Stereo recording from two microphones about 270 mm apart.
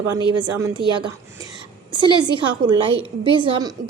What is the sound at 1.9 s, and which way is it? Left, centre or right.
A woman's voice, centre.